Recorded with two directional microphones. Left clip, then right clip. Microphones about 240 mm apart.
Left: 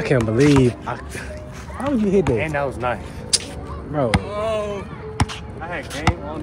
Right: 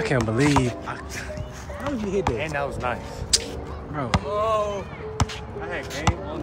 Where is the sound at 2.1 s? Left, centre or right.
Left.